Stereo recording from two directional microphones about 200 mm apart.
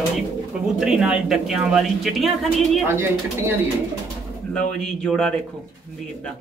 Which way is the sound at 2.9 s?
10° right (ahead or behind).